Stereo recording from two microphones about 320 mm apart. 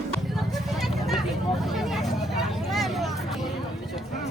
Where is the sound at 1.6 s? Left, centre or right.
Centre.